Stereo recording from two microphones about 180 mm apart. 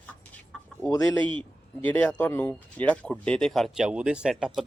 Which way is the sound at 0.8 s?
20° left (ahead or behind).